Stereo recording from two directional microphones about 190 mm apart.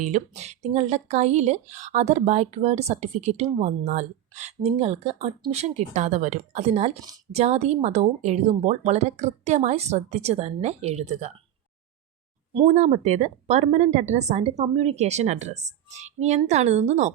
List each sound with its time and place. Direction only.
0.0 s speech: 35° right (ahead or behind)
12.6 s speech: 40° right (ahead or behind)